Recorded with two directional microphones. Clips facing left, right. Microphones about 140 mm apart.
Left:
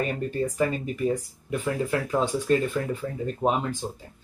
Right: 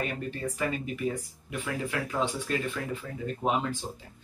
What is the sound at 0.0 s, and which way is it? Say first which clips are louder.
Speech: left 6 dB; 35° left (ahead or behind).